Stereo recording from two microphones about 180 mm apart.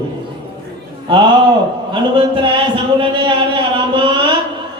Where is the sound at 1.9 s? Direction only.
30° right (ahead or behind).